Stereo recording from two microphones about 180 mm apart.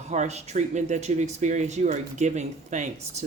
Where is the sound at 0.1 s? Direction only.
40° right (ahead or behind).